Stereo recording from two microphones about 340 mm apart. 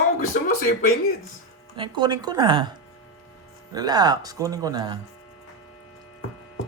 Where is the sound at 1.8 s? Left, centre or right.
Centre.